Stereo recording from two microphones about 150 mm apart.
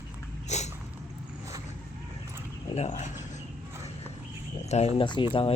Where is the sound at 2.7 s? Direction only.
50° left (ahead or behind).